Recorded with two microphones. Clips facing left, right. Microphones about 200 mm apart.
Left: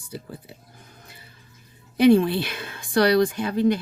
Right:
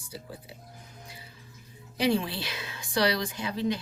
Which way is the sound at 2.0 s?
55° left (ahead or behind).